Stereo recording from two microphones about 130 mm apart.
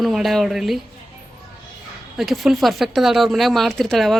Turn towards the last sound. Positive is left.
turn(degrees=0)  # may be behind; listen again after turning